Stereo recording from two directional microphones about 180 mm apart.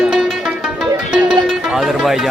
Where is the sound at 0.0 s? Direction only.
Centre (ahead or behind).